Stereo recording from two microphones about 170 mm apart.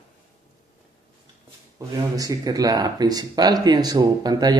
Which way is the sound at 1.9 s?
20° right (ahead or behind).